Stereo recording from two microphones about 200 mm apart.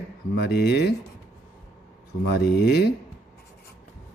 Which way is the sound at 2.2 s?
55° left (ahead or behind).